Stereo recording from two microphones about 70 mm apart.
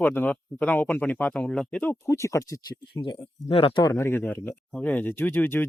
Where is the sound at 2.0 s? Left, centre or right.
Left.